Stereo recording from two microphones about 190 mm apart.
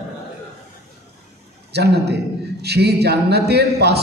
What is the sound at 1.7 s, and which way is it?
A man's voice, 60° right (ahead or behind).